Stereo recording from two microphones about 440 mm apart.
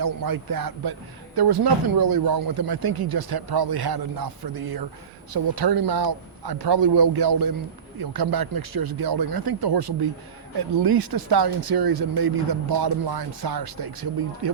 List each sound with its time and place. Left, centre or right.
0.0 s speech: right
1.4 s speech: right
7.9 s speech: right